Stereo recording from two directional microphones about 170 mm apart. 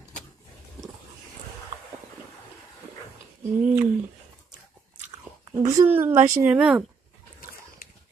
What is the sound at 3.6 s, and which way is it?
Speech, 10° right (ahead or behind).